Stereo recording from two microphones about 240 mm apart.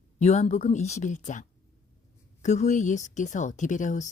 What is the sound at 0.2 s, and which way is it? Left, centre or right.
Speech, left.